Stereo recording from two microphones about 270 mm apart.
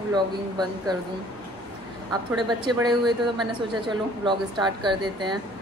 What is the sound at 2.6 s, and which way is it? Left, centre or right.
Speech, centre.